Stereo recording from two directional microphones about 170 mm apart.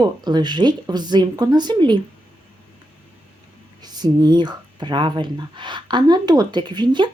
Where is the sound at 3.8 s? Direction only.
25° right (ahead or behind).